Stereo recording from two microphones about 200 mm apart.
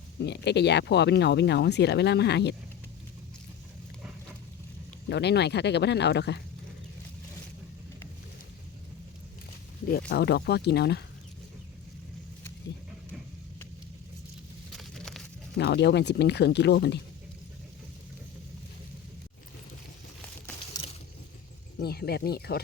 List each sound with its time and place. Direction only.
0.2 s speech: 60° left (ahead or behind)
5.0 s speech: 60° left (ahead or behind)
10.1 s speech: 55° left (ahead or behind)
14.7 s a sound: centre (ahead or behind)
15.5 s speech: 60° left (ahead or behind)
20.7 s a sound: 20° left (ahead or behind)
21.8 s speech: 50° left (ahead or behind)